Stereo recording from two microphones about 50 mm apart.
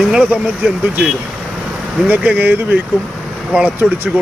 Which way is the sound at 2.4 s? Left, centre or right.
Right.